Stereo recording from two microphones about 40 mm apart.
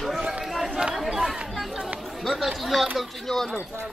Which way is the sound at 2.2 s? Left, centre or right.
Centre.